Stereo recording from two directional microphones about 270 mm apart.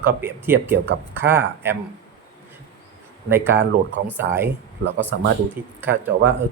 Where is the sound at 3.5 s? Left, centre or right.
Right.